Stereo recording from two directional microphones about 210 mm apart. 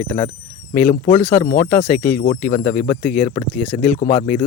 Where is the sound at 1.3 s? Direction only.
40° left (ahead or behind).